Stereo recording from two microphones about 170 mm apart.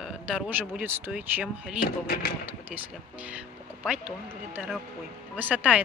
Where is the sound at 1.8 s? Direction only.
60° left (ahead or behind).